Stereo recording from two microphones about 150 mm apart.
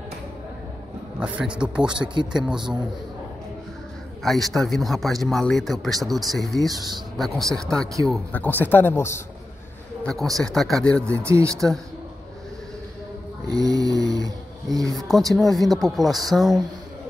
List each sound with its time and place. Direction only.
1.2 s speech: 5° right (ahead or behind)
4.2 s a man's voice: centre (ahead or behind); by 9.2 s 15° left (ahead or behind)
10.0 s speech: centre (ahead or behind)
11.2 s snoring: 20° right (ahead or behind)
13.5 s snoring: 25° right (ahead or behind)
14.8 s speech: centre (ahead or behind)